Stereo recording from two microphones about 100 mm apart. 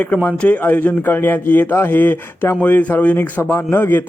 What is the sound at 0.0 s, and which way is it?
Speech, 15° left (ahead or behind).